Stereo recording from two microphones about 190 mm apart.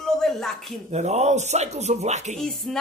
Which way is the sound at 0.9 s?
35° right (ahead or behind).